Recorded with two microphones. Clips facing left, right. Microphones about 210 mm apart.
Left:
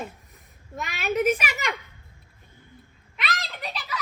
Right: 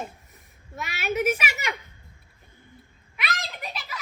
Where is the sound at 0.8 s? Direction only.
5° right (ahead or behind).